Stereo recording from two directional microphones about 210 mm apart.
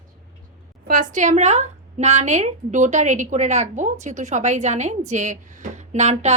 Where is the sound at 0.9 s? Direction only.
35° right (ahead or behind).